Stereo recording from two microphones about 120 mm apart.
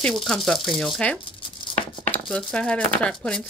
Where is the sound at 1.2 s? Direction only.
45° left (ahead or behind).